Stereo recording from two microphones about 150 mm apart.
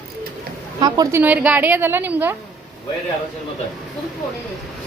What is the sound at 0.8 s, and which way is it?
Speech, 25° right (ahead or behind).